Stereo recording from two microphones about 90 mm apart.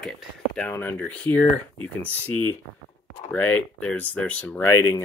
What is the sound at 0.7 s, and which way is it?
Speech, 25° left (ahead or behind).